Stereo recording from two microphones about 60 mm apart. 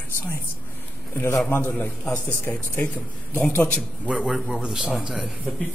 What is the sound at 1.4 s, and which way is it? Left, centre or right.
Speech, left.